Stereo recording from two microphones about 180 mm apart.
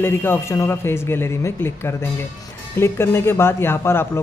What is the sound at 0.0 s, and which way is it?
Speech, 10° left (ahead or behind).